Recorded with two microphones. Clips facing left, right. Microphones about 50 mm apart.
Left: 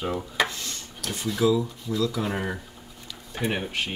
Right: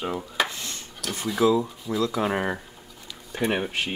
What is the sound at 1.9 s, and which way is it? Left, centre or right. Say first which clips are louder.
Speech: right 2 dB; right.